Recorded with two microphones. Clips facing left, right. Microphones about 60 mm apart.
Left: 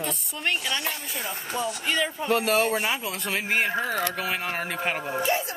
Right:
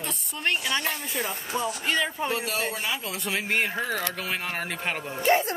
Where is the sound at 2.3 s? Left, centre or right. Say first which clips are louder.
Left 6 dB; left.